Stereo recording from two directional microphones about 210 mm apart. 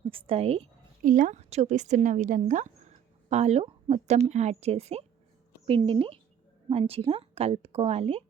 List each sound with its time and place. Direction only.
0.1 s a woman's voice: 25° right (ahead or behind)